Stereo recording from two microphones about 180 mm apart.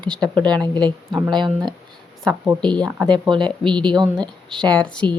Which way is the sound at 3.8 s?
25° right (ahead or behind).